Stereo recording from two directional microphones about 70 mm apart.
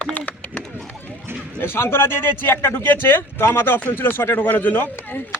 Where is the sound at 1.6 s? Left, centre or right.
Left.